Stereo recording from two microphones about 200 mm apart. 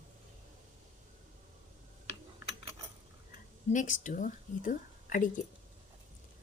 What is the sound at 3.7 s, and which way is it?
A woman's voice, 40° left (ahead or behind).